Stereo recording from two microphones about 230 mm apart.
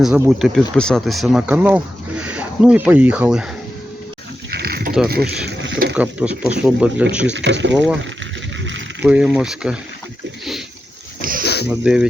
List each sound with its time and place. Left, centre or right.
0.0 s speech: centre
4.5 s sheep: right
5.0 s speech: right
6.0 s speech: centre
7.3 s speech: right
9.0 s speech: centre
11.2 s a sound: right
11.4 s a sound: left
11.7 s speech: centre